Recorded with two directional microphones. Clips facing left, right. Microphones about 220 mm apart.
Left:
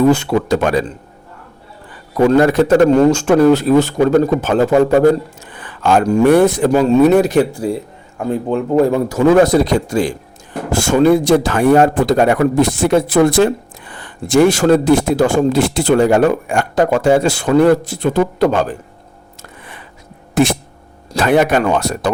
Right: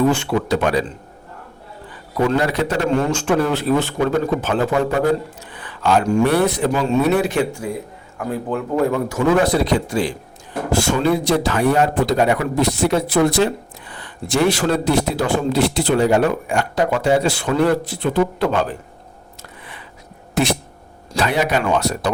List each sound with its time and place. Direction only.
0.1 s speech: 45° left (ahead or behind)
2.3 s speech: 50° left (ahead or behind); by 8.6 s 25° left (ahead or behind)
9.0 s speech: 40° left (ahead or behind)
19.4 s a sound: 45° left (ahead or behind)
20.3 s speech: 50° left (ahead or behind)